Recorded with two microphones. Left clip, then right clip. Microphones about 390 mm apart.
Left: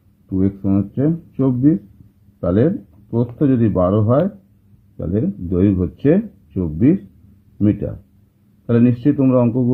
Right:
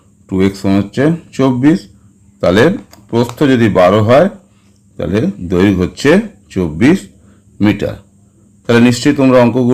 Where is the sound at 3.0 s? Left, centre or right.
Centre.